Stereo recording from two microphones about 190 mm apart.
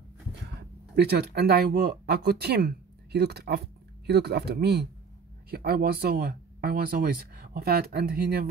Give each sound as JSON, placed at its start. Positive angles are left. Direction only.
{"t": 0.6, "sound": "speech", "side_deg": -60}